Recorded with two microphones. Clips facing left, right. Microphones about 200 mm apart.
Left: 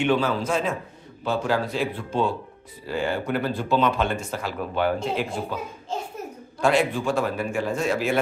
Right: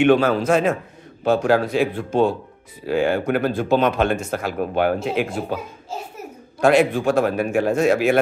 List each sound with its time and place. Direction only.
0.0 s a man's voice: 65° right (ahead or behind); by 2.3 s 50° right (ahead or behind)
2.9 s speech: 60° right (ahead or behind)
5.1 s speech: 60° right (ahead or behind)
5.9 s a child's voice: 5° right (ahead or behind)
6.6 s speech: 65° right (ahead or behind)